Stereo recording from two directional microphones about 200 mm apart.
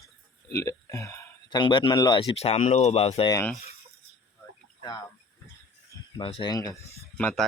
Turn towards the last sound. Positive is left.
turn(degrees=5)  # may be behind; listen again after turning